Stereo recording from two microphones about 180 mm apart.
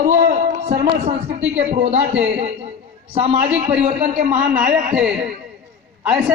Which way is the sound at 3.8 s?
45° right (ahead or behind).